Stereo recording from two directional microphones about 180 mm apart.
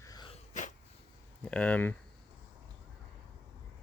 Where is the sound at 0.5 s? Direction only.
40° left (ahead or behind).